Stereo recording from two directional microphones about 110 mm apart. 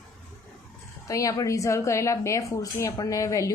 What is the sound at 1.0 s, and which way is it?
A woman's voice, 30° left (ahead or behind).